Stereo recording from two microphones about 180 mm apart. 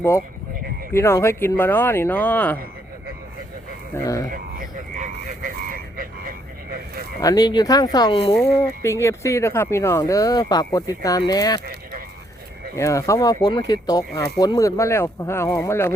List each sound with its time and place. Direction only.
0.9 s speech: 15° left (ahead or behind)
4.0 s speech: 20° left (ahead or behind)
5.3 s vehicle: 50° right (ahead or behind)
7.2 s speech: 20° left (ahead or behind)
8.6 s speech: 15° left (ahead or behind)
11.6 s clip-clop: 60° right (ahead or behind)
12.7 s speech: 15° left (ahead or behind)